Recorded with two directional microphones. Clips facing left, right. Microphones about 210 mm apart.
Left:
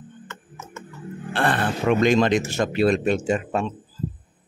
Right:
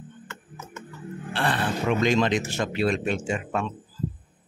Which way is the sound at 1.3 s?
55° left (ahead or behind).